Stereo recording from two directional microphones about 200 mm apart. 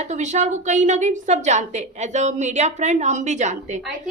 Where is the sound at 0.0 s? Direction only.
35° right (ahead or behind).